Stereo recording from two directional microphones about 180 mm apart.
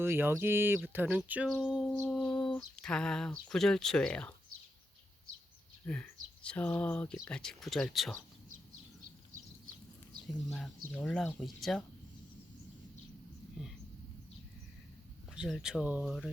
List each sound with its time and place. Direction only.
0.0 s speech: 10° right (ahead or behind); by 4.4 s 5° left (ahead or behind)
5.8 s speech: 5° left (ahead or behind)
9.0 s a sound: 50° right (ahead or behind)
10.9 s speech: 5° left (ahead or behind)
15.4 s speech: centre (ahead or behind)